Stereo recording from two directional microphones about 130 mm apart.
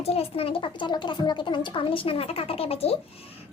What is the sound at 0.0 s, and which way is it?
A child's voice, 50° left (ahead or behind).